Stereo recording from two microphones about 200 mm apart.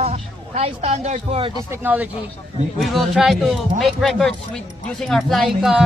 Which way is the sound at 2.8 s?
Centre (ahead or behind).